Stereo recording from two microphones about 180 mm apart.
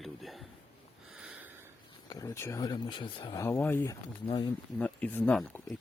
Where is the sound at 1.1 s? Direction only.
5° right (ahead or behind).